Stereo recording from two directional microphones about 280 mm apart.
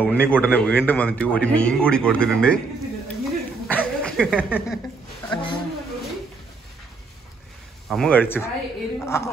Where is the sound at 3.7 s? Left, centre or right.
Centre.